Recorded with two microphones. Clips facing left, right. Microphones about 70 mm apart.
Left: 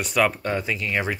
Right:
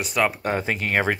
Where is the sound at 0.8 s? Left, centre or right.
Right.